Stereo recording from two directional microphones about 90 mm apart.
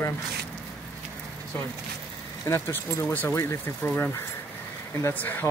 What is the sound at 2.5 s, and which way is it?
Speech, 30° left (ahead or behind).